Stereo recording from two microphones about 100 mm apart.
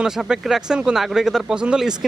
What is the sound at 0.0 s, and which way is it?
Speech, 5° right (ahead or behind).